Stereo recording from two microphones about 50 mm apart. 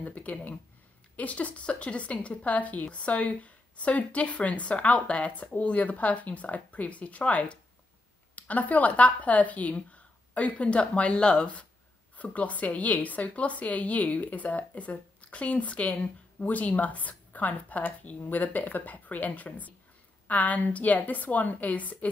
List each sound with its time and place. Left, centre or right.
0.0 s a woman's voice: left
15.9 s speech: centre
16.4 s speech: left